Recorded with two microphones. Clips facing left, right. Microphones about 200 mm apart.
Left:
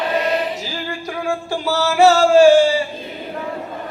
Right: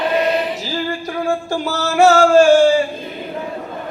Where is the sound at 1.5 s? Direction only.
45° right (ahead or behind).